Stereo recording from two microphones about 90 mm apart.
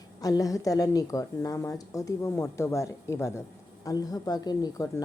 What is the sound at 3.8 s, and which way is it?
A woman's voice, 40° left (ahead or behind).